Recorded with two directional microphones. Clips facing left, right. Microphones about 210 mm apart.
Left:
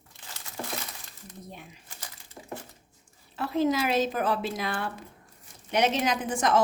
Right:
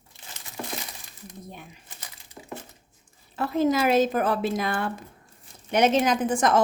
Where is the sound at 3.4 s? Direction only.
45° right (ahead or behind).